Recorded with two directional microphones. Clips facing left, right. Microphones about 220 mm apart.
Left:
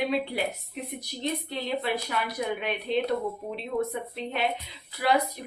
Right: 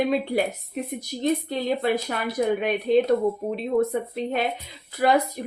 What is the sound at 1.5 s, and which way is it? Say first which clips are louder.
Speech: right 6 dB; 45° right (ahead or behind).